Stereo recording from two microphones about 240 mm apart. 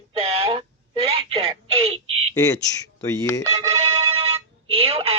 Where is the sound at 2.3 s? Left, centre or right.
Centre.